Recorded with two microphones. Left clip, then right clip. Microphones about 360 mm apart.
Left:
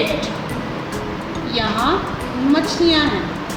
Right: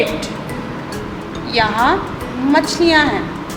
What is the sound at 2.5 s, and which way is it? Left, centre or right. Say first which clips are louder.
Music: right 4 dB; right.